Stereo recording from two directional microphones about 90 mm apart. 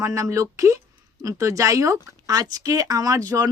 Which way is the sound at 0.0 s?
35° right (ahead or behind).